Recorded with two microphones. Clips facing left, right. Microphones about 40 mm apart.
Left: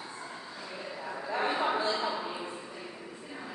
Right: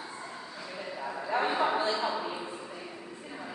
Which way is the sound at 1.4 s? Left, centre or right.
Centre.